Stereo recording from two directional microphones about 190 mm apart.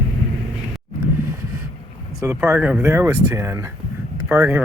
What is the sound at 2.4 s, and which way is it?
Speech, 10° right (ahead or behind).